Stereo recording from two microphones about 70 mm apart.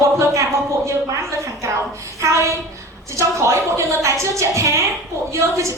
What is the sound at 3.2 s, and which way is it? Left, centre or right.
A woman's voice, right.